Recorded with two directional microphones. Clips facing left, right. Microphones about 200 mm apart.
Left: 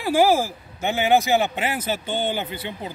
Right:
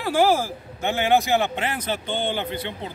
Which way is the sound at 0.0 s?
10° left (ahead or behind).